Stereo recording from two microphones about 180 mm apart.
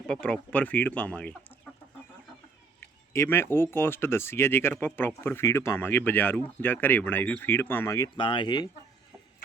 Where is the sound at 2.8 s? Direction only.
15° left (ahead or behind).